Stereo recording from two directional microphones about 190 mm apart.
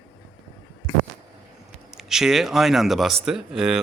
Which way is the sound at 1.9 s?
Centre (ahead or behind).